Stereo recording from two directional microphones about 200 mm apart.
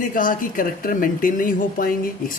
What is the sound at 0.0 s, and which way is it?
Speech, 45° left (ahead or behind).